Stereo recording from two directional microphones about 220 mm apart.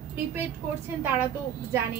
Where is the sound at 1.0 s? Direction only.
10° right (ahead or behind).